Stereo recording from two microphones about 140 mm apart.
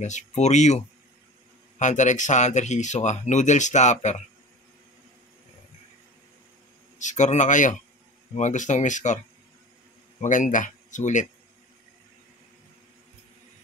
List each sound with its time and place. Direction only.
0.0 s speech: 55° left (ahead or behind)
7.0 s speech: 60° left (ahead or behind)
10.2 s speech: 65° left (ahead or behind)